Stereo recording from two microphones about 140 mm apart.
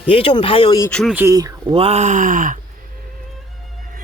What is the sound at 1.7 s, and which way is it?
Speech, 50° right (ahead or behind).